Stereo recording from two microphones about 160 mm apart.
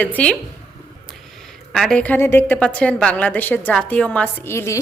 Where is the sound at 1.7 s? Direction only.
Centre (ahead or behind).